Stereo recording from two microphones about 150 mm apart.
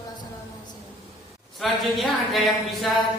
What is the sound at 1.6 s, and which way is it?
A woman's voice, centre (ahead or behind).